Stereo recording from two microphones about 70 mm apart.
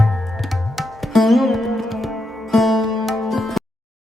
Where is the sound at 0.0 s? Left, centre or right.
Centre.